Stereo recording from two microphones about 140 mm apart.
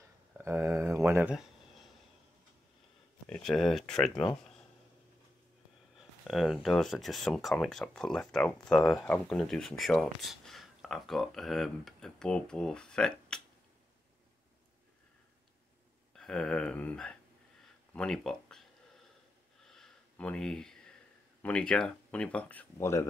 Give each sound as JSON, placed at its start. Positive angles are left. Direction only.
{"t": 0.4, "sound": "speech", "side_deg": -20}
{"t": 3.3, "sound": "speech", "side_deg": 5}
{"t": 5.9, "sound": "speech", "side_deg": 0}
{"t": 16.2, "sound": "speech", "side_deg": 5}
{"t": 19.7, "sound": "a sound", "side_deg": 5}
{"t": 21.4, "sound": "speech", "side_deg": 10}